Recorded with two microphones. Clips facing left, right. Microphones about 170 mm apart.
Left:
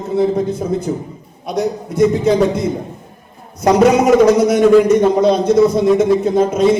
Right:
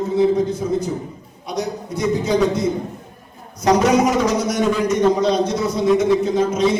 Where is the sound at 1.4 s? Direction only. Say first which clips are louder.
Left 6 dB; 55° left (ahead or behind).